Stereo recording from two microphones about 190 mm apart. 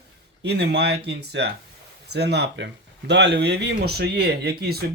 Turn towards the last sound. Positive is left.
turn(degrees=-55)  # may be behind; listen again after turning